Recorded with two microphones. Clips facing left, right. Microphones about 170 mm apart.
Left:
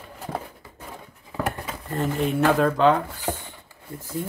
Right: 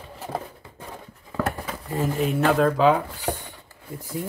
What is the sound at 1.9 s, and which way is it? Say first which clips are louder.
Speech: even; 5° right (ahead or behind).